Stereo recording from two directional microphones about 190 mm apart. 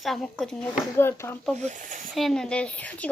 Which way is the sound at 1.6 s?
40° right (ahead or behind).